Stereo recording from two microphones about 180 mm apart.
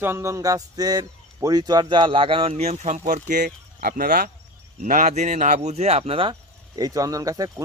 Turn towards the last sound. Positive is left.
turn(degrees=-20)  # may be behind; listen again after turning